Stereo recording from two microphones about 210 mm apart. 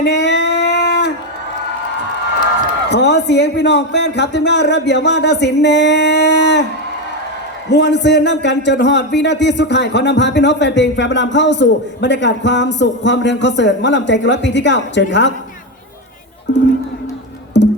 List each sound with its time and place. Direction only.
0.0 s a sound: 55° left (ahead or behind)
2.9 s a man's voice: 55° left (ahead or behind)
7.7 s a man's voice: 55° left (ahead or behind)
16.5 s a man's voice: 60° left (ahead or behind)
17.5 s music: 55° left (ahead or behind)